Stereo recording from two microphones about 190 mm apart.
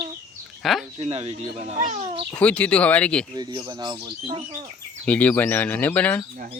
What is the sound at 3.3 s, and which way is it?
Speech, 20° right (ahead or behind).